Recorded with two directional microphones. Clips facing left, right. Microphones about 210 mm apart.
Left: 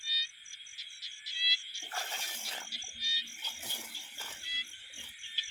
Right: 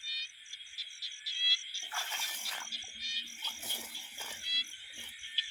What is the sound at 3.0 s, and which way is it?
Cricket, 50° right (ahead or behind).